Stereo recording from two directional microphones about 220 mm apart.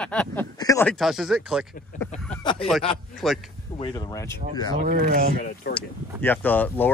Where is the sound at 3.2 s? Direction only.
Centre (ahead or behind).